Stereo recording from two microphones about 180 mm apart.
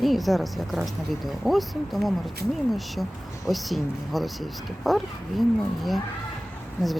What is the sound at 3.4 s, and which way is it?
Speech, centre (ahead or behind).